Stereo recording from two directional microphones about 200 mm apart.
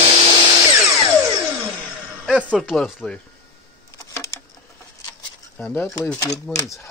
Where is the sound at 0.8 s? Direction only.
15° right (ahead or behind).